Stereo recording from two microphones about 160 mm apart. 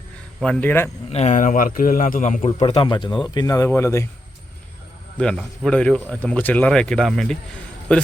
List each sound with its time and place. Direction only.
0.3 s speech: 5° left (ahead or behind)
1.1 s a man's voice: 45° left (ahead or behind)
2.6 s speech: 25° left (ahead or behind)
5.2 s speech: 5° left (ahead or behind)